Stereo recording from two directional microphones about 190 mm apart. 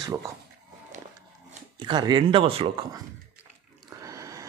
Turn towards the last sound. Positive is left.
turn(degrees=-15)  # may be behind; listen again after turning